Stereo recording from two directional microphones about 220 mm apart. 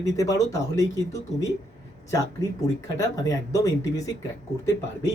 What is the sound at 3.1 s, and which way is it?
Speech, 15° left (ahead or behind).